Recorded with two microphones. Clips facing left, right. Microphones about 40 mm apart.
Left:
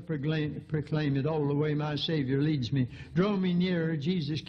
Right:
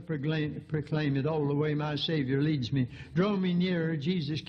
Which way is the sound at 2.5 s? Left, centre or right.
Centre.